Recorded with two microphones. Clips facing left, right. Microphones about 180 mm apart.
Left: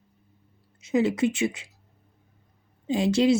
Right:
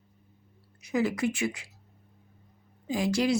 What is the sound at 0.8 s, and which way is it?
Speech, 25° left (ahead or behind).